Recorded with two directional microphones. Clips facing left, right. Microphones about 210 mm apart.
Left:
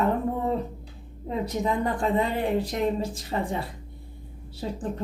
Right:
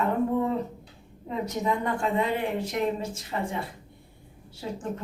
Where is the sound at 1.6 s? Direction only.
35° left (ahead or behind).